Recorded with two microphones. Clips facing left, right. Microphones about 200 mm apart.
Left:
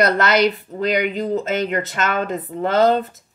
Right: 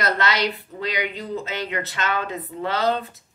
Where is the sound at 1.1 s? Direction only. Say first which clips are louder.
Left 8 dB; 45° left (ahead or behind).